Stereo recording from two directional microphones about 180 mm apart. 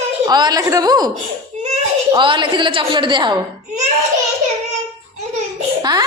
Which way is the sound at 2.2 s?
25° right (ahead or behind).